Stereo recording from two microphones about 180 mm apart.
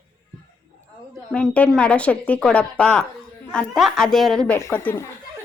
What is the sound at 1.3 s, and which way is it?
A woman's voice, 5° left (ahead or behind).